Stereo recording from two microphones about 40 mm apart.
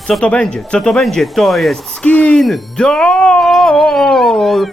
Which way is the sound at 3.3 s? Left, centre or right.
Centre.